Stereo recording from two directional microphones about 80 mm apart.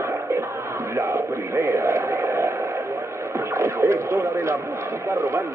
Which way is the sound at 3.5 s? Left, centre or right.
Right.